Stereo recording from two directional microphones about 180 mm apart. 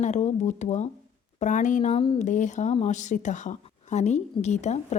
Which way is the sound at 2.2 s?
45° left (ahead or behind).